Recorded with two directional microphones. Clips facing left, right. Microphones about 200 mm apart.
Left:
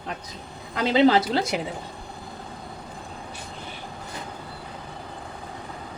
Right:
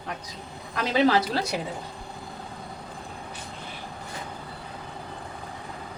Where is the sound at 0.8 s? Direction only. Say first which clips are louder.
Left 3 dB; 25° left (ahead or behind).